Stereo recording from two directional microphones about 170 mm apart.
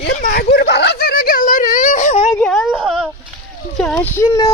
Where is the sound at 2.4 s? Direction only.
Centre (ahead or behind); by 4.5 s 20° left (ahead or behind).